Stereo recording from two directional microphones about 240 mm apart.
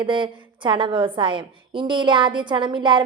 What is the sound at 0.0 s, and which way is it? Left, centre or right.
A woman's voice, centre.